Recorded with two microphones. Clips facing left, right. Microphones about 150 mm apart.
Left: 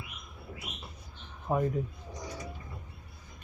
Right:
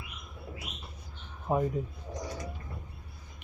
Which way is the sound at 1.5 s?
15° right (ahead or behind).